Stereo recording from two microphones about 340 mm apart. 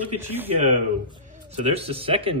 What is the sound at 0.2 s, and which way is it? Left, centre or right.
Speech, centre.